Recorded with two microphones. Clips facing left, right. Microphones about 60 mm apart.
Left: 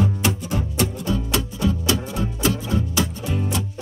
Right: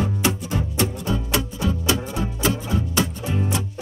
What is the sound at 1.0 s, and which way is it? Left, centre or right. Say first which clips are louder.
Music: even; centre.